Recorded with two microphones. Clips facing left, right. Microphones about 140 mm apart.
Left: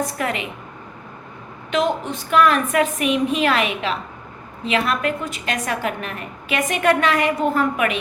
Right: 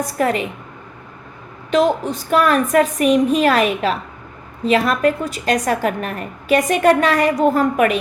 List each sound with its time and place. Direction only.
0.1 s a woman's voice: 40° right (ahead or behind)
1.7 s a woman's voice: 35° right (ahead or behind)